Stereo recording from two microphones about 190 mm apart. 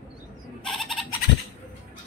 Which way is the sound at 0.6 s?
Centre (ahead or behind).